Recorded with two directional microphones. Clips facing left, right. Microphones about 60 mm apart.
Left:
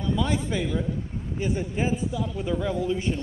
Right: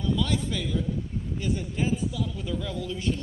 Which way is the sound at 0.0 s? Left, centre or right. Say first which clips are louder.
Left 1 dB; left.